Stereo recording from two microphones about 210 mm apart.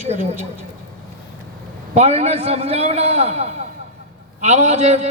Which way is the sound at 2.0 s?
30° right (ahead or behind).